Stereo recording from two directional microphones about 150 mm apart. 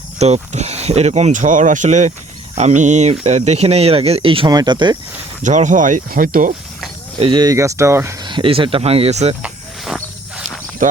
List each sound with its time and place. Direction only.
0.2 s speech: 45° right (ahead or behind); by 4.9 s 30° right (ahead or behind)
5.4 s speech: 55° right (ahead or behind)
7.2 s speech: 30° right (ahead or behind)
8.2 s speech: 30° right (ahead or behind)
9.4 s a sound: 5° right (ahead or behind)